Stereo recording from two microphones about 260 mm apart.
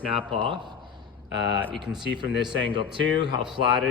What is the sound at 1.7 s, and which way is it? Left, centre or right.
Speech, centre.